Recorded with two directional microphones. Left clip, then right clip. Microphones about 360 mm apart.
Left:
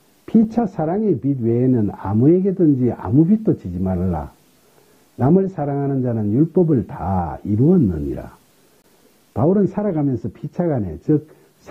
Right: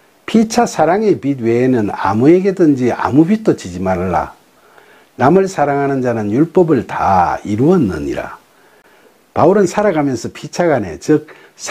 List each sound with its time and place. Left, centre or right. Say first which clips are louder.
0.2 s speech: right 6 dB; centre